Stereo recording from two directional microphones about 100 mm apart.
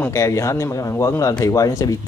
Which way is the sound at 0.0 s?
30° left (ahead or behind).